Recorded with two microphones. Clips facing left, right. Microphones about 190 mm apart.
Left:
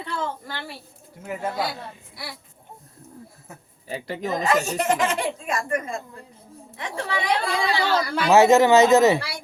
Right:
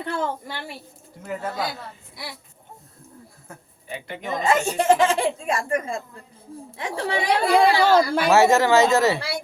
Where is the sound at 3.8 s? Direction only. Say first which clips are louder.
Left 3 dB; 35° left (ahead or behind).